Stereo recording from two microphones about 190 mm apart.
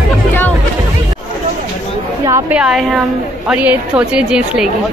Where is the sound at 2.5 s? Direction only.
5° right (ahead or behind).